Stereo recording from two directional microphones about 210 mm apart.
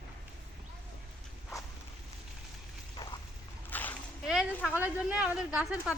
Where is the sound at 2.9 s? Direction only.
20° left (ahead or behind).